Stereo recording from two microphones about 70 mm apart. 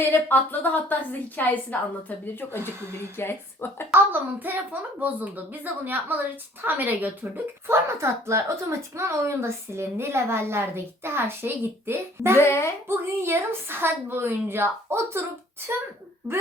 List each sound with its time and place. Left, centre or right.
0.0 s a woman's voice: left
3.9 s a woman's voice: right
7.9 s a woman's voice: right
12.4 s a woman's voice: left
13.2 s a woman's voice: right